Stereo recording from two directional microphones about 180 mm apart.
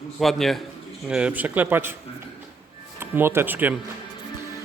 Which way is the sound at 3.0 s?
10° right (ahead or behind).